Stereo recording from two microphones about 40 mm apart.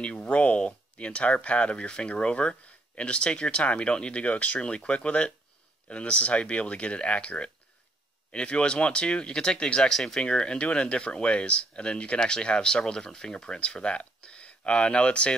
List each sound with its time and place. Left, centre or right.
0.2 s speech: left
4.6 s speech: left
10.2 s speech: left